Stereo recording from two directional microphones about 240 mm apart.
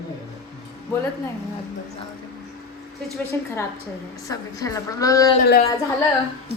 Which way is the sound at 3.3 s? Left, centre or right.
Centre.